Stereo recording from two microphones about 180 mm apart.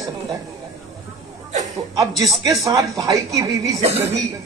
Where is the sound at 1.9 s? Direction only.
20° right (ahead or behind).